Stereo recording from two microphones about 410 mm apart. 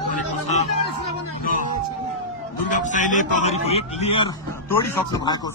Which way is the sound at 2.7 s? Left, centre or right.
Centre.